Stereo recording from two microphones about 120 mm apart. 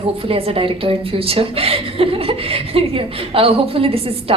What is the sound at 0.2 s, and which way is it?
A woman's voice, 50° right (ahead or behind).